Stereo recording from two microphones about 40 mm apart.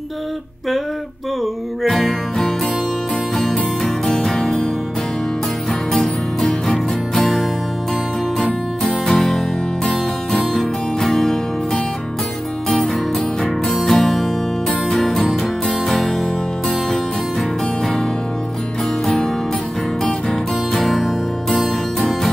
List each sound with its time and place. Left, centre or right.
1.8 s music: centre
3.8 s music: centre
7.2 s music: centre
8.8 s music: centre
10.5 s music: centre
13.7 s music: centre
20.7 s music: centre